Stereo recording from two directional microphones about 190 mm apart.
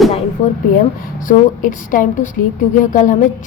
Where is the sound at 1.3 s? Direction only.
45° left (ahead or behind).